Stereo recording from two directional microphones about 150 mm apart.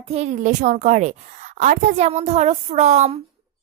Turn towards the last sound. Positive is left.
turn(degrees=-45)  # may be behind; listen again after turning